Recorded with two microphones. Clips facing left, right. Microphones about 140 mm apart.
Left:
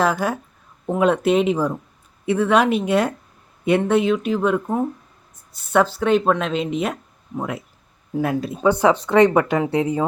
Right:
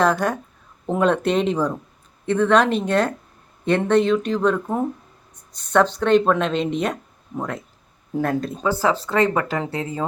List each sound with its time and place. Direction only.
0.0 s speech: 5° left (ahead or behind)
8.8 s speech: 20° left (ahead or behind)